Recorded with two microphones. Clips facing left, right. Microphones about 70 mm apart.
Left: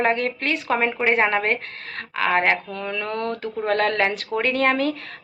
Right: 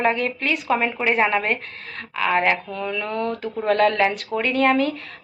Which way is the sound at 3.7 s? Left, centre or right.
Left.